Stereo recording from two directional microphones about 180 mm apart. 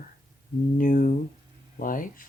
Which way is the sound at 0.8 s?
50° left (ahead or behind).